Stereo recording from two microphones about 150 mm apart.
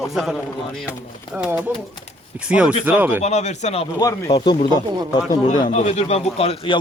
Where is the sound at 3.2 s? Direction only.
50° left (ahead or behind).